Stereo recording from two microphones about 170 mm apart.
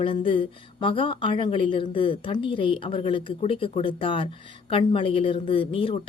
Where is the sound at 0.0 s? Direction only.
30° left (ahead or behind).